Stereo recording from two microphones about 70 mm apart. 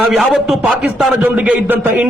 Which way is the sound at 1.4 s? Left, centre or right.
Right.